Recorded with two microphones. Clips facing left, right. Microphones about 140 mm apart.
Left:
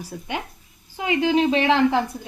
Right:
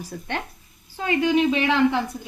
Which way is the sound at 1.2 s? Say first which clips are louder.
Left 1 dB; 30° left (ahead or behind).